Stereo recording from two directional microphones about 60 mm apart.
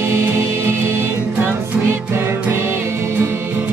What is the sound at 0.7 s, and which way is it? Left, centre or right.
Music, right.